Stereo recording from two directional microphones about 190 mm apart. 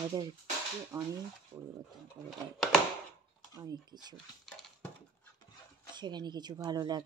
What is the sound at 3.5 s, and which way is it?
Speech, 20° right (ahead or behind).